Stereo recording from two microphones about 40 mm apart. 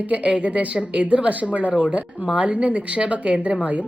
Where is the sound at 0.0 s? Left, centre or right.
Right.